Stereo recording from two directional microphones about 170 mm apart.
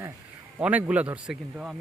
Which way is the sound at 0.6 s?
10° right (ahead or behind).